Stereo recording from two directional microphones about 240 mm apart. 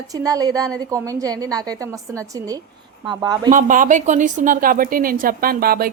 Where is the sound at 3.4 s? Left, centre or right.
Right.